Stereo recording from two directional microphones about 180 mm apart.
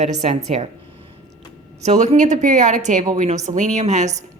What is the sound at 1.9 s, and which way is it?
A woman's voice, 40° right (ahead or behind).